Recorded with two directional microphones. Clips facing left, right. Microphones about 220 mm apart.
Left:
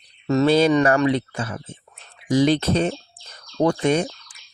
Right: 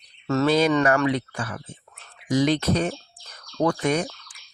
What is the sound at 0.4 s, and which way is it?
Speech, 30° left (ahead or behind).